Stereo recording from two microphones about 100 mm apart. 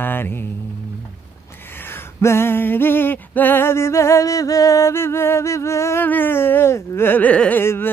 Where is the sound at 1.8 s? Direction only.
25° left (ahead or behind).